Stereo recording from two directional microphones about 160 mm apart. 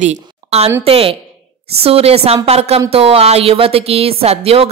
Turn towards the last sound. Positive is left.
turn(degrees=-40)  # may be behind; listen again after turning